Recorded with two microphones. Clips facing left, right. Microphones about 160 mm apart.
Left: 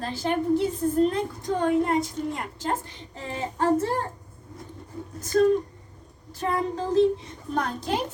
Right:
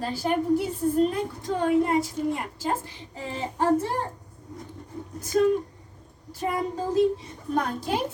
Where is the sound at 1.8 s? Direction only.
5° right (ahead or behind).